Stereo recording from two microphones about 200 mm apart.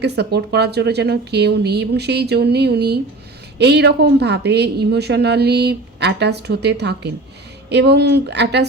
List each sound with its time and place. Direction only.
0.0 s a woman's voice: 55° right (ahead or behind)